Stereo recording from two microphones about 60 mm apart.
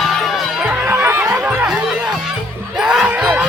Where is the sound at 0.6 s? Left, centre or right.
Right.